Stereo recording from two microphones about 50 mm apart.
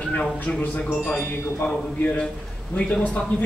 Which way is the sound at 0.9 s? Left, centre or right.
Centre.